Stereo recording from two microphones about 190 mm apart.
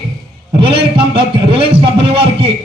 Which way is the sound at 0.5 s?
30° right (ahead or behind).